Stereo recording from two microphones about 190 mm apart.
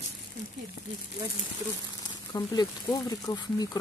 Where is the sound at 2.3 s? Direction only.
20° left (ahead or behind).